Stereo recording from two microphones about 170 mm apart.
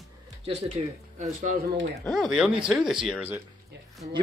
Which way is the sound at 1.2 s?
45° right (ahead or behind).